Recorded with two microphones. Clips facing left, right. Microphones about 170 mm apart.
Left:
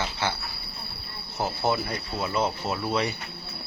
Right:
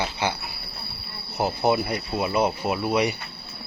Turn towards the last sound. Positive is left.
turn(degrees=-15)  # may be behind; listen again after turning